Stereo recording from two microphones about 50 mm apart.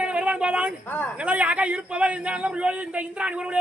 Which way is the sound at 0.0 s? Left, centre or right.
Right.